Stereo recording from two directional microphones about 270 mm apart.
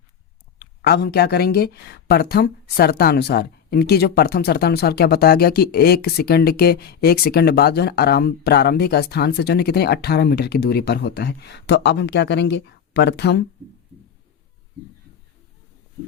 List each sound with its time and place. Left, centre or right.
0.6 s speech: left